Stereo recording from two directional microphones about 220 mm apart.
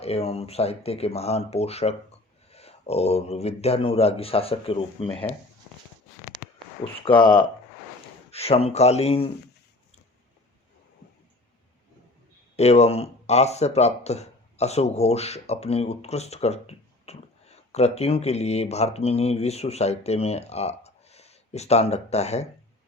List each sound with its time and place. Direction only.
0.0 s speech: 25° left (ahead or behind)
7.0 s speech: 20° left (ahead or behind)
12.5 s speech: 30° left (ahead or behind)